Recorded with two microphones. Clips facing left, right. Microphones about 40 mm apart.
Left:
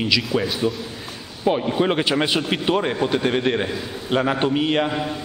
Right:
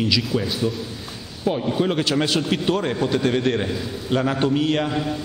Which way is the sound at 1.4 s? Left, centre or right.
Left.